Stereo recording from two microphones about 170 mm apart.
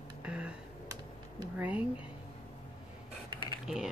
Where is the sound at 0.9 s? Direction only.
20° right (ahead or behind).